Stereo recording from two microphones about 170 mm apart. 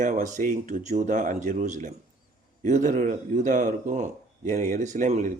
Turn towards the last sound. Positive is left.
turn(degrees=-50)  # may be behind; listen again after turning